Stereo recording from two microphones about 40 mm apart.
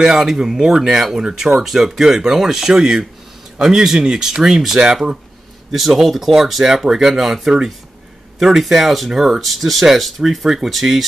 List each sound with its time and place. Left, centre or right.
0.0 s speech: centre